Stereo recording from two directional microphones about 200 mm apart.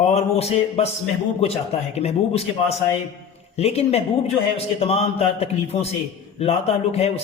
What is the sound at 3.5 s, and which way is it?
A man's voice, 30° left (ahead or behind).